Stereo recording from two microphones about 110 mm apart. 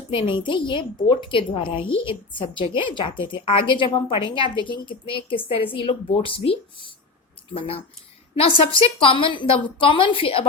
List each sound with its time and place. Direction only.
0.1 s a woman's voice: 50° left (ahead or behind)